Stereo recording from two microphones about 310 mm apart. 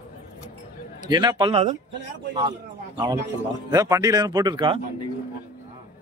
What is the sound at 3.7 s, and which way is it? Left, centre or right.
Speech, centre.